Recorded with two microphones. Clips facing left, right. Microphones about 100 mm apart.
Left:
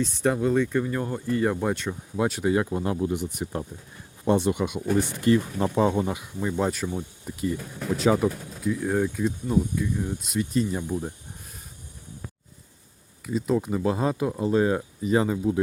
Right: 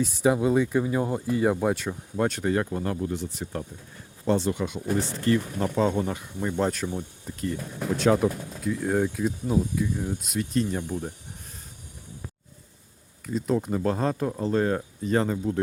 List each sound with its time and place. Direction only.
0.0 s speech: 5° right (ahead or behind)
13.2 s speech: centre (ahead or behind)